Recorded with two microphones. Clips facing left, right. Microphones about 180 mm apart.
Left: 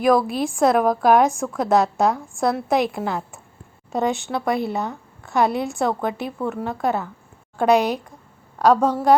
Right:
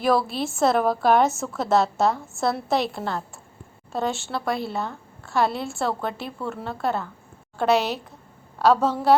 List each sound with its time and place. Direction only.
0.1 s a woman's voice: 15° left (ahead or behind)
0.5 s a woman's voice: centre (ahead or behind)
2.6 s a woman's voice: 15° left (ahead or behind)